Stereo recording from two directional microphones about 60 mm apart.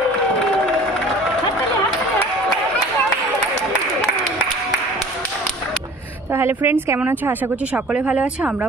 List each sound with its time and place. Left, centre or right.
6.3 s a woman's voice: right
7.7 s speech: centre